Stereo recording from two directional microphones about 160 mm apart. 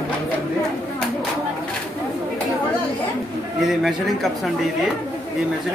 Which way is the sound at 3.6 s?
Centre (ahead or behind).